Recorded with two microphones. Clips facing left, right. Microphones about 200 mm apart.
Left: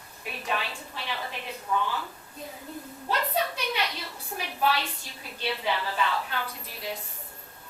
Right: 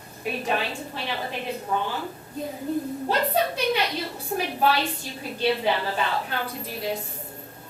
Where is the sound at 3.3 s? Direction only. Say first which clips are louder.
Right 6 dB; 35° right (ahead or behind).